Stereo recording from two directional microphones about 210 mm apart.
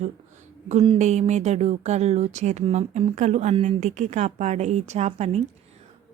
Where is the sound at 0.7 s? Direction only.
30° right (ahead or behind).